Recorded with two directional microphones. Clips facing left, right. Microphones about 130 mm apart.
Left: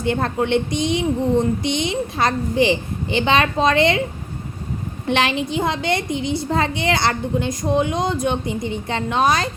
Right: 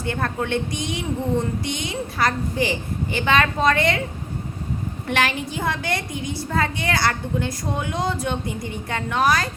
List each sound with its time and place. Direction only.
0.0 s a woman's voice: 20° left (ahead or behind)
5.0 s a woman's voice: 25° left (ahead or behind)